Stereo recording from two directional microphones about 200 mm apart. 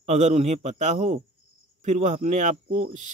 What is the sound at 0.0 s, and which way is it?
Speech, 35° right (ahead or behind).